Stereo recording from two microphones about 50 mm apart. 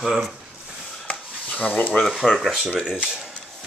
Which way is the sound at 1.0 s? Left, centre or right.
Left.